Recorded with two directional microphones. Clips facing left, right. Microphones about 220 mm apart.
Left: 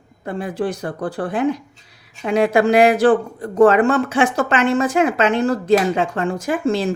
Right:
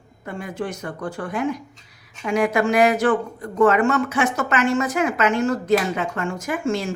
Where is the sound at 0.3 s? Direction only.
35° left (ahead or behind).